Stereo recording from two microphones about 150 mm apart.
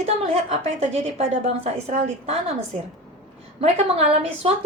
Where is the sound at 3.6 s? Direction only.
45° right (ahead or behind).